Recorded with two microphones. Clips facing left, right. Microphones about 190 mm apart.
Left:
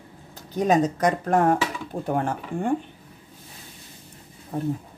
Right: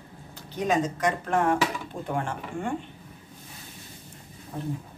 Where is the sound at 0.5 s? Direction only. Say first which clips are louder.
Left 5 dB; 40° left (ahead or behind).